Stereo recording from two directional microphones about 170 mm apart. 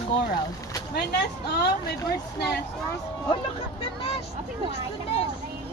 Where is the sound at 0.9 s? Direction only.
75° left (ahead or behind).